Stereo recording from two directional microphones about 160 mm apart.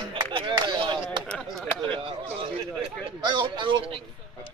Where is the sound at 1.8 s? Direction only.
35° right (ahead or behind).